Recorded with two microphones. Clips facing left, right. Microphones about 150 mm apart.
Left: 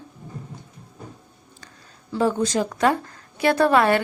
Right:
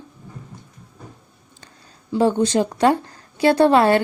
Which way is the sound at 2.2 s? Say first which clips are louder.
Right 4 dB; 30° right (ahead or behind).